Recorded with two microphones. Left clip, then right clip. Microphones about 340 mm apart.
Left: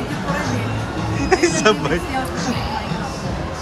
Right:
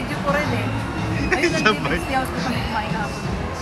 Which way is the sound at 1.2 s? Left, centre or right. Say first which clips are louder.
Left 3 dB; centre.